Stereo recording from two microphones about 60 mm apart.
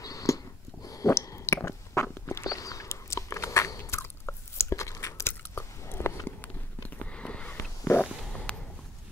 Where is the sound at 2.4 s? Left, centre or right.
Left.